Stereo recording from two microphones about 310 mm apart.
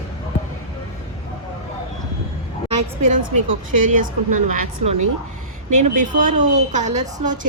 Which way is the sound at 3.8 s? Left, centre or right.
Right.